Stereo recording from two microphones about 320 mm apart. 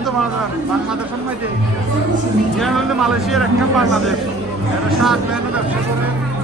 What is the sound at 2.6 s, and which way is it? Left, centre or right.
Speech, centre.